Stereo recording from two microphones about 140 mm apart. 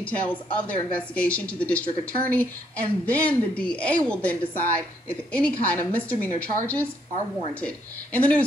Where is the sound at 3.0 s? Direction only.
10° left (ahead or behind).